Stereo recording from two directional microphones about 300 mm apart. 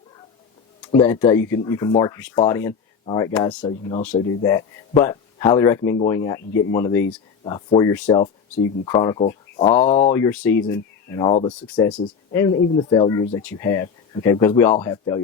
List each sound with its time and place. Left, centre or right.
0.9 s speech: centre
9.5 s a sound: centre
9.8 s speech: left
10.1 s speech: centre
11.7 s speech: centre